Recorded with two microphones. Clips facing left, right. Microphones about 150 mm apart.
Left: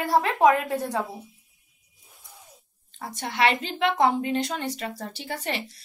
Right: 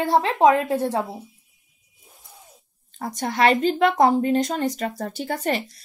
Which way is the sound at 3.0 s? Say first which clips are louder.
Right 4 dB; 40° right (ahead or behind).